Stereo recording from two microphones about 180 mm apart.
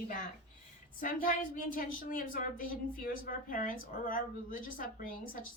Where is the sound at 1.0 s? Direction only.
50° left (ahead or behind).